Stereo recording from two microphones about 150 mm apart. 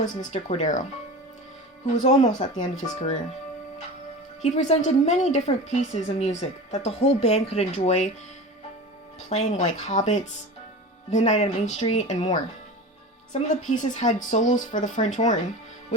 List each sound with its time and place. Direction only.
0.0 s a woman's voice: 50° left (ahead or behind)
2.0 s a woman's voice: 50° left (ahead or behind)
4.4 s a woman's voice: 45° left (ahead or behind)
9.3 s a woman's voice: 50° left (ahead or behind)
15.9 s music: 50° left (ahead or behind)